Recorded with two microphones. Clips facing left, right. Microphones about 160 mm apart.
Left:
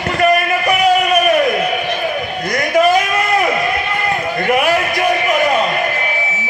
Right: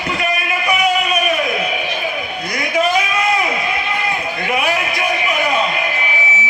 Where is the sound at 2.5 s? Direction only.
50° left (ahead or behind).